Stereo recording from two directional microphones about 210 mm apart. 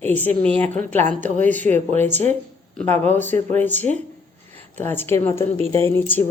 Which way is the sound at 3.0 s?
10° left (ahead or behind).